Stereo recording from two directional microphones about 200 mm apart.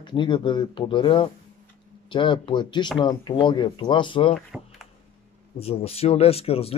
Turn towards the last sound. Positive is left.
turn(degrees=30)  # may be behind; listen again after turning